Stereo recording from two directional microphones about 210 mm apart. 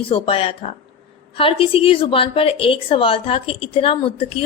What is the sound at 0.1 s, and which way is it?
A woman's voice, 25° left (ahead or behind).